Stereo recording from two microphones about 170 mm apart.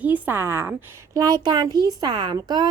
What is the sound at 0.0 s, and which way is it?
A woman's voice, 10° right (ahead or behind).